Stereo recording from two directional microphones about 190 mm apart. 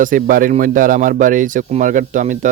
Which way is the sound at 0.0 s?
45° right (ahead or behind).